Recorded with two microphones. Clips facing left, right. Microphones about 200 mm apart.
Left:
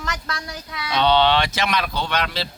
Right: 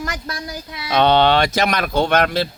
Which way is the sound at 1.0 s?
50° right (ahead or behind).